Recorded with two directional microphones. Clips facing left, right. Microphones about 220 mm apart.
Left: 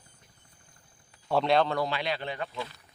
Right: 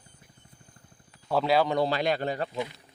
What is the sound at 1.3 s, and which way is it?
Speech, 5° right (ahead or behind).